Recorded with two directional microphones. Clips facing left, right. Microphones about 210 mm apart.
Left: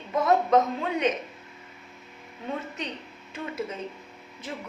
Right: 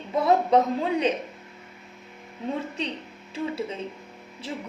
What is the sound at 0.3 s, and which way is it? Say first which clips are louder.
Speech: right 1 dB; 30° right (ahead or behind).